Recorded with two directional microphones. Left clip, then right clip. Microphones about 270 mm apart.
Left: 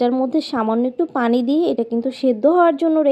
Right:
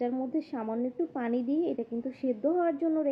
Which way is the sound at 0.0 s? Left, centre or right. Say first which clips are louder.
Left 14 dB; left.